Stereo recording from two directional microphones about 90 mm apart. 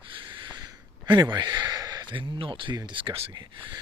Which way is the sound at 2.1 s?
70° right (ahead or behind).